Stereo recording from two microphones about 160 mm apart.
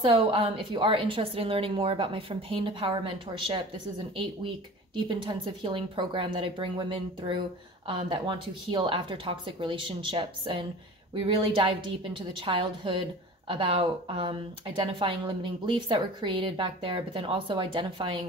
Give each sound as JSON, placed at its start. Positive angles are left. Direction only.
{"t": 0.0, "sound": "a woman's voice", "side_deg": -35}
{"t": 4.2, "sound": "a woman's voice", "side_deg": -30}